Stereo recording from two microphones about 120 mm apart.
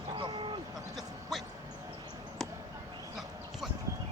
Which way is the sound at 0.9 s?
Centre (ahead or behind).